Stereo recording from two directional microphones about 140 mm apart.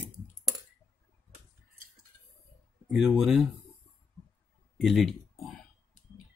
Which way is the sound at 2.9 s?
5° right (ahead or behind).